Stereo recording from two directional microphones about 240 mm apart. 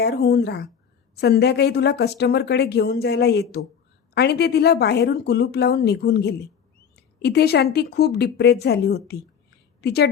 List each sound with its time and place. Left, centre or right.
0.0 s a woman's voice: left